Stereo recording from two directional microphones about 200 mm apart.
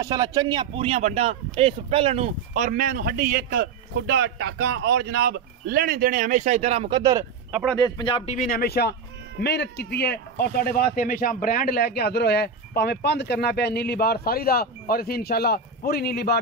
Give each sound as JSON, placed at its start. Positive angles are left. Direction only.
{"t": 0.0, "sound": "speech", "side_deg": -20}
{"t": 7.8, "sound": "speech", "side_deg": 25}
{"t": 8.3, "sound": "speech", "side_deg": 45}